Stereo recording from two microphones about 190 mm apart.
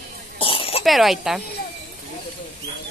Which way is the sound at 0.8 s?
Centre (ahead or behind).